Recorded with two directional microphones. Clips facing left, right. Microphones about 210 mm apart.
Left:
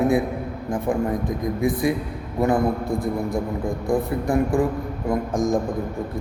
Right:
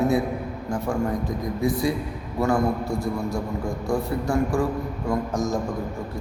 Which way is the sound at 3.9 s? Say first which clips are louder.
Left 3 dB; 20° left (ahead or behind).